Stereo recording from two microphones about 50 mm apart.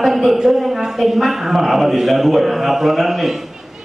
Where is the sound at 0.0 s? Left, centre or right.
Centre.